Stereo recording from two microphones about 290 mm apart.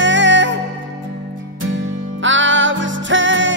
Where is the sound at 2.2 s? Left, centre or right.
Right.